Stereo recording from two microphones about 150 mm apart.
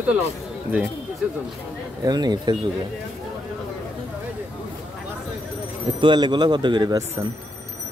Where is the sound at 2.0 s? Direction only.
25° right (ahead or behind).